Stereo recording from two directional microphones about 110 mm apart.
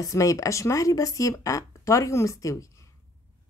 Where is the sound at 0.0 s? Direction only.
30° left (ahead or behind).